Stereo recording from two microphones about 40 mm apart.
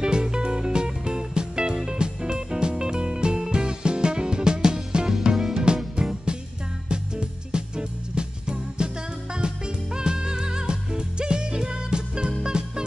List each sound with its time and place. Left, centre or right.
0.0 s music: right
5.9 s music: right